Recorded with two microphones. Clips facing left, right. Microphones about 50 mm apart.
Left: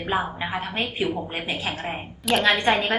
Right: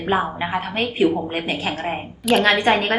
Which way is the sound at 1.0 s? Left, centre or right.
Right.